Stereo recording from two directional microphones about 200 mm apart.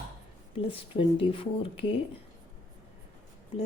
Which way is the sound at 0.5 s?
25° left (ahead or behind).